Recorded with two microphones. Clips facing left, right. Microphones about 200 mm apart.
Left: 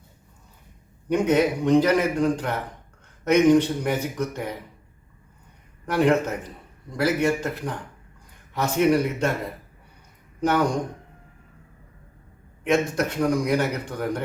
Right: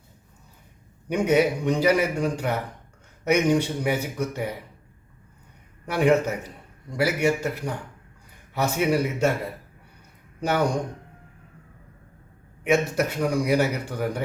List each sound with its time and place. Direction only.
1.0 s a man's voice: 10° right (ahead or behind)
5.8 s a man's voice: 10° right (ahead or behind)
10.4 s a man's voice: 10° right (ahead or behind)
12.6 s a man's voice: 10° right (ahead or behind)